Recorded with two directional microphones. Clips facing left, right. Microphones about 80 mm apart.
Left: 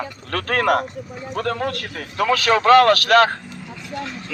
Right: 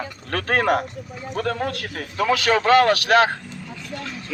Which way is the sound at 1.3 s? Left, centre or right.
Left.